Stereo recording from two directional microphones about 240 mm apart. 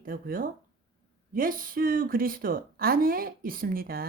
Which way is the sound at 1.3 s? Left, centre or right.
Right.